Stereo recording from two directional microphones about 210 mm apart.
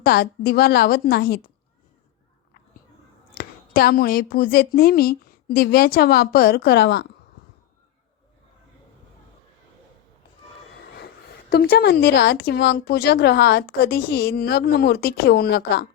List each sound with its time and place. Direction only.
0.0 s a woman's voice: 50° left (ahead or behind)
3.3 s a woman's voice: 45° left (ahead or behind)
10.9 s a woman's voice: 50° left (ahead or behind)